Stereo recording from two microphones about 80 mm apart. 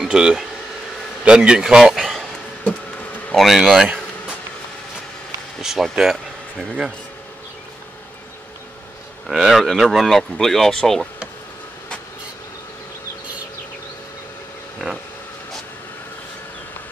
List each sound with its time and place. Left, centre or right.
0.0 s a man's voice: centre
2.6 s a sound: centre
3.3 s speech: centre
3.8 s a sound: centre
5.6 s speech: centre
9.3 s speech: centre